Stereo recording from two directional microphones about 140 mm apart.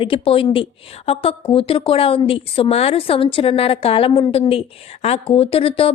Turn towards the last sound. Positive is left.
turn(degrees=40)  # may be behind; listen again after turning